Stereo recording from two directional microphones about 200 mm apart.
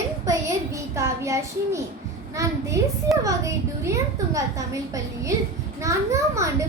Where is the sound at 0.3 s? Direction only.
15° right (ahead or behind).